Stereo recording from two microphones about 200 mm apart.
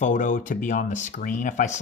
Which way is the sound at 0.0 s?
40° left (ahead or behind).